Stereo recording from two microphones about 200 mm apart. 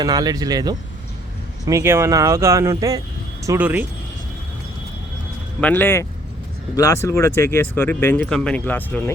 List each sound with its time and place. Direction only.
0.0 s speech: 20° right (ahead or behind)
5.5 s speech: 10° left (ahead or behind)